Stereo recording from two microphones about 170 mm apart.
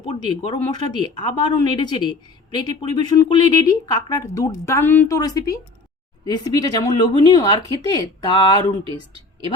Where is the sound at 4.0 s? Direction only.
20° left (ahead or behind).